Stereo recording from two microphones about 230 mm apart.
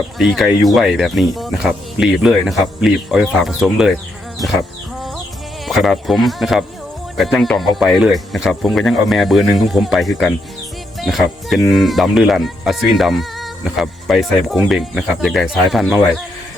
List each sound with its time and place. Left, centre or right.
0.2 s speech: centre
4.9 s music: centre
5.6 s speech: centre